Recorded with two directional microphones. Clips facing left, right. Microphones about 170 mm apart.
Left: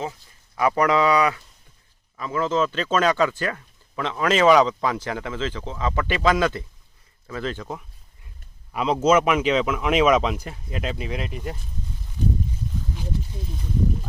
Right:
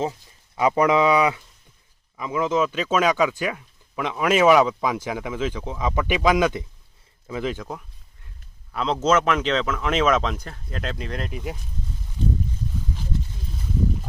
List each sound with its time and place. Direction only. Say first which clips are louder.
0.1 s speech: right 3 dB; 20° right (ahead or behind)
7.6 s speech: left 1 dB; centre (ahead or behind)